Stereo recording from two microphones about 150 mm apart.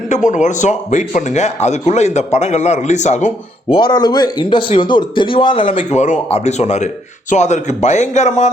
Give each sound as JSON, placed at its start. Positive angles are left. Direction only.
{"t": 0.1, "sound": "speech", "side_deg": 55}
{"t": 3.7, "sound": "a man's voice", "side_deg": 30}
{"t": 5.7, "sound": "speech", "side_deg": 55}